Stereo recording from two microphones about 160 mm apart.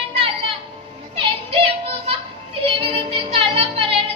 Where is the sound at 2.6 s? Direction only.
35° right (ahead or behind).